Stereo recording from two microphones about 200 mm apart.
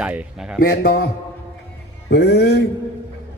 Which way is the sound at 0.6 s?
50° left (ahead or behind).